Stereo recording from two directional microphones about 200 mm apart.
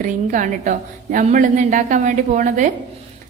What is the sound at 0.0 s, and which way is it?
A woman's voice, 40° right (ahead or behind).